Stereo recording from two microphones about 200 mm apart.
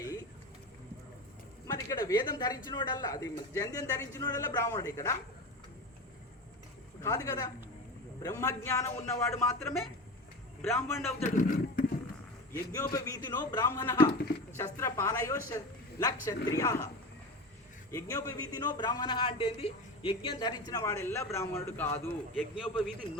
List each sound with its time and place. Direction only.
1.6 s a sound: 15° left (ahead or behind)
2.6 s speech: 20° left (ahead or behind)
7.0 s speech: 15° left (ahead or behind)
11.2 s speech: 40° left (ahead or behind)
12.9 s speech: 15° left (ahead or behind)
17.9 s a man's voice: 15° left (ahead or behind)
22.4 s a man's voice: 5° right (ahead or behind)